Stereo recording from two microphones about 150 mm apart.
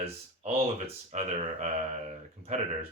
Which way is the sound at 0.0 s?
40° right (ahead or behind).